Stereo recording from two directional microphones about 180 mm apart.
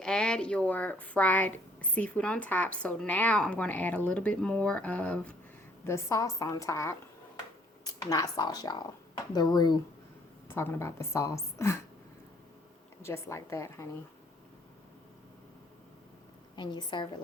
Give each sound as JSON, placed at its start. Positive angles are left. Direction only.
{"t": 0.0, "sound": "a woman's voice", "side_deg": 5}
{"t": 13.0, "sound": "a woman's voice", "side_deg": 15}
{"t": 16.6, "sound": "speech", "side_deg": 25}